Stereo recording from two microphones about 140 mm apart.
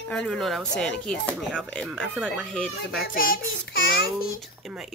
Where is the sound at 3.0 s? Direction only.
90° left.